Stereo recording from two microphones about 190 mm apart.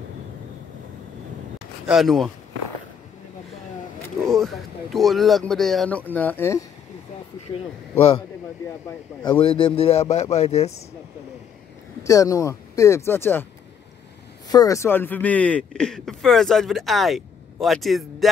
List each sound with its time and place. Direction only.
1.9 s speech: centre (ahead or behind)
4.2 s speech: centre (ahead or behind)
9.4 s a man's voice: 30° left (ahead or behind)
12.0 s speech: 15° left (ahead or behind)
14.5 s speech: 20° left (ahead or behind); by 18.3 s centre (ahead or behind)